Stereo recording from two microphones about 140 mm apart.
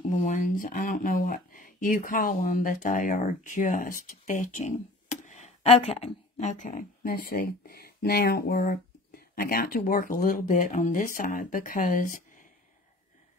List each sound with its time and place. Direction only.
0.1 s speech: 65° left (ahead or behind)